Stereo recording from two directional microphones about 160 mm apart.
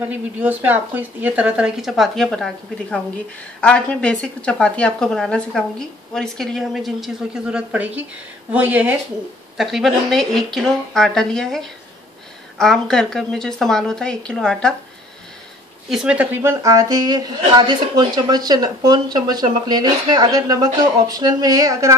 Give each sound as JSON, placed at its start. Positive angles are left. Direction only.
{"t": 0.1, "sound": "a woman's voice", "side_deg": -10}
{"t": 15.9, "sound": "a woman's voice", "side_deg": -5}